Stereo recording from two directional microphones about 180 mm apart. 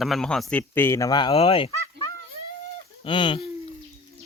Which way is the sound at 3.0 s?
25° left (ahead or behind).